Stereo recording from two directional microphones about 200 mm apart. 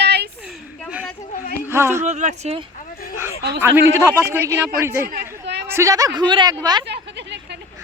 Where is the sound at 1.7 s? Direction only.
10° right (ahead or behind).